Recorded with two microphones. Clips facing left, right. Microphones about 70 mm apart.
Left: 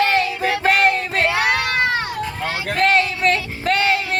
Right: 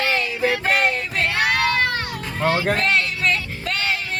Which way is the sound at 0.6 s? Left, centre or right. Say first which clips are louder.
Left 4 dB; left.